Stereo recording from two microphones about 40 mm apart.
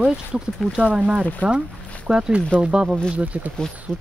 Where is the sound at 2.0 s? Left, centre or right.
Centre.